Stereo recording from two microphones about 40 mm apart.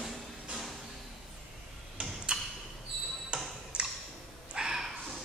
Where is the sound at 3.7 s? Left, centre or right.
Right.